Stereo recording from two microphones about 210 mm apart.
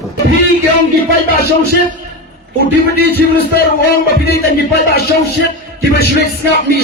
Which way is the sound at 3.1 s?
45° left (ahead or behind).